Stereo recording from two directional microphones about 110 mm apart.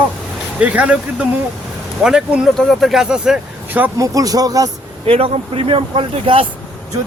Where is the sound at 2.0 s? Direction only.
5° right (ahead or behind).